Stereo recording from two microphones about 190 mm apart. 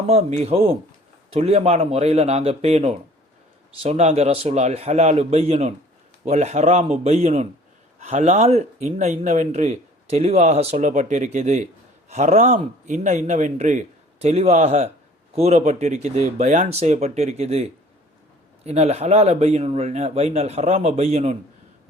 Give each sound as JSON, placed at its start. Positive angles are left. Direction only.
{"t": 0.1, "sound": "speech", "side_deg": -35}